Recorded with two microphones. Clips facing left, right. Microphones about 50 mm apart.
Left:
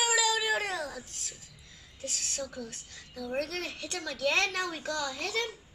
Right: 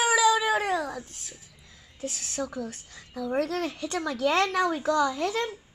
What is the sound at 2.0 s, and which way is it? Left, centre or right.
A child's voice, centre.